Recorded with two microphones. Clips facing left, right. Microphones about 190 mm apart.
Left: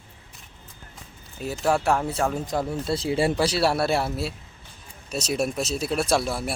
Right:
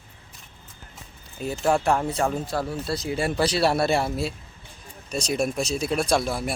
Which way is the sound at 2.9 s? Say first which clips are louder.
Left 5 dB; 30° left (ahead or behind).